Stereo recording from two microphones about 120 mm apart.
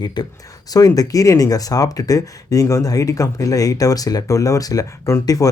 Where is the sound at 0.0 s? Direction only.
35° left (ahead or behind).